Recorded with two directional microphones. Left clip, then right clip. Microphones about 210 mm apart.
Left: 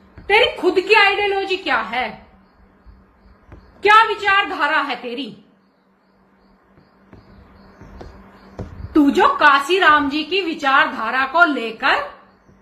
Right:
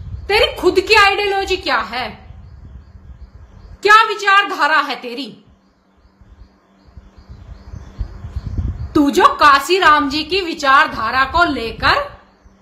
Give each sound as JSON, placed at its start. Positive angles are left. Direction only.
{"t": 0.3, "sound": "a woman's voice", "side_deg": -15}
{"t": 3.8, "sound": "a woman's voice", "side_deg": -15}
{"t": 8.9, "sound": "a woman's voice", "side_deg": -20}